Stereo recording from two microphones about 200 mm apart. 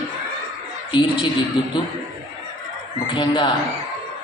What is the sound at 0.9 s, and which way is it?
Speech, 25° left (ahead or behind).